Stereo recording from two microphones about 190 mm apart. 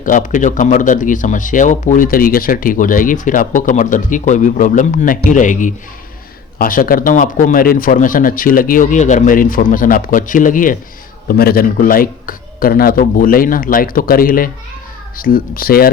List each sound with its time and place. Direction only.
0.0 s speech: 45° left (ahead or behind)